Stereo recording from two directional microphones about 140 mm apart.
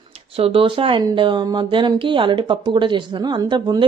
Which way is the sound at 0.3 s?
40° right (ahead or behind).